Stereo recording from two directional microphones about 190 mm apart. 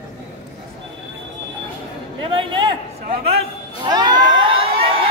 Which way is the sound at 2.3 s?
25° right (ahead or behind).